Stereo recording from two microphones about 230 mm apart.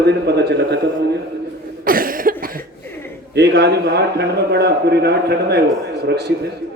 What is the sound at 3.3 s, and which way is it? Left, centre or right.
A man's voice, right.